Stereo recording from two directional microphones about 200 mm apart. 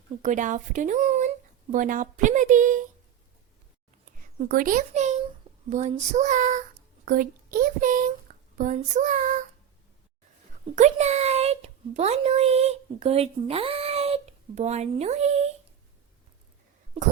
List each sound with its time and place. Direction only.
0.2 s speech: 40° right (ahead or behind)
4.0 s a child's voice: 40° right (ahead or behind)
10.8 s a child's voice: 35° right (ahead or behind)